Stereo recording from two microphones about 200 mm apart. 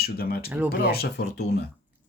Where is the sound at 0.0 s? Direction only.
50° left (ahead or behind).